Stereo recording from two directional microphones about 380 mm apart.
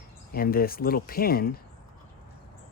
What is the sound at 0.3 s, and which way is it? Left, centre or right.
Speech, left.